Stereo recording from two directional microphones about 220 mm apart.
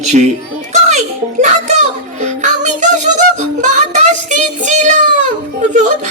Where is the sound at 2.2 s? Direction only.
35° right (ahead or behind).